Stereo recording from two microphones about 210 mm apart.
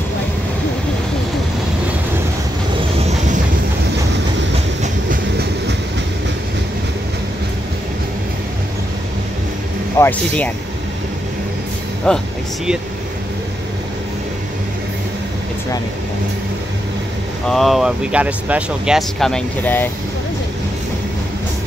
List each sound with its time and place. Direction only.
5.1 s train: 50° right (ahead or behind)
9.9 s speech: 10° left (ahead or behind)
12.1 s speech: 5° left (ahead or behind)
17.5 s speech: centre (ahead or behind)